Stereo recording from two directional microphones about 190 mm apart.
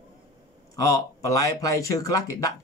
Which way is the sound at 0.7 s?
15° left (ahead or behind).